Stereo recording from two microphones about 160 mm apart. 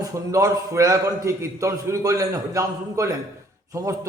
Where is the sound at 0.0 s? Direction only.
20° right (ahead or behind).